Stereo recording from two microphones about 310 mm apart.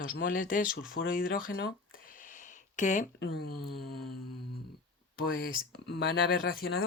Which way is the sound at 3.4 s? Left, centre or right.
Left.